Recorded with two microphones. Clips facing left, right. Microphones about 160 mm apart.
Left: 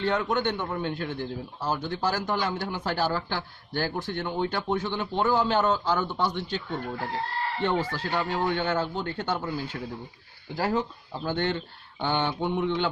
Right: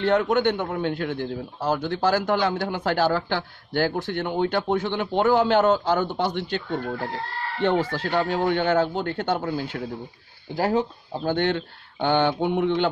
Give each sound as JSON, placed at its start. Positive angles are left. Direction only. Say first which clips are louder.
{"t": 0.0, "sound": "a man's voice", "louder": "right 6 dB", "side_deg": -65}
{"t": 10.5, "sound": "a man's voice", "louder": "right 4 dB", "side_deg": -55}